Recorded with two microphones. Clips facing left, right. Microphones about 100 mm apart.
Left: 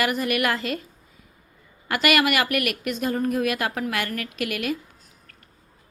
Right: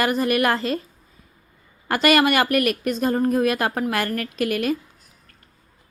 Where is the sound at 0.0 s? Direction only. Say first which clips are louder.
Right 3 dB; 35° right (ahead or behind).